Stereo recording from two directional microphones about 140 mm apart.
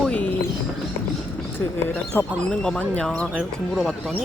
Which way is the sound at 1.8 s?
15° left (ahead or behind).